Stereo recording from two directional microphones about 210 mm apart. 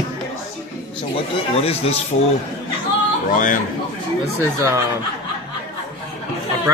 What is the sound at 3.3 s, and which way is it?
Speech, 40° left (ahead or behind).